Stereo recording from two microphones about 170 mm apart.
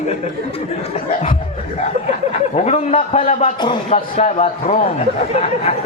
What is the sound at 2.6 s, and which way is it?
A man's voice, 40° left (ahead or behind).